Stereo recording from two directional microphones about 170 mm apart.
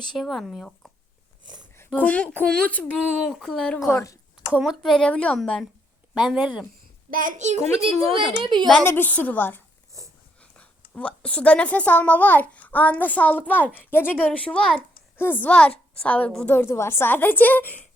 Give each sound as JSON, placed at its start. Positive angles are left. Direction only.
{"t": 0.1, "sound": "speech", "side_deg": 0}
{"t": 1.9, "sound": "speech", "side_deg": 10}
{"t": 7.1, "sound": "a child's voice", "side_deg": -50}
{"t": 8.6, "sound": "a child's voice", "side_deg": 0}
{"t": 10.6, "sound": "a child's voice", "side_deg": 10}